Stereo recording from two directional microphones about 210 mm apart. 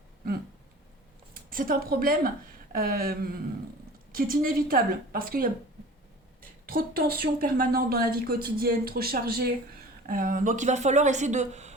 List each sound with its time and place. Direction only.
1.3 s a woman's voice: 40° right (ahead or behind)
6.7 s a woman's voice: 45° right (ahead or behind)